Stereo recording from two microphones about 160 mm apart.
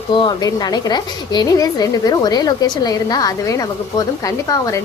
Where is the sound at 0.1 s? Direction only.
30° left (ahead or behind).